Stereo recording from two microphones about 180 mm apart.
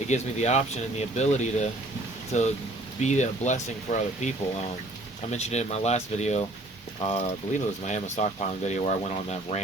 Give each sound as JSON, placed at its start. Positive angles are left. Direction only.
{"t": 0.1, "sound": "speech", "side_deg": 40}
{"t": 5.3, "sound": "speech", "side_deg": 40}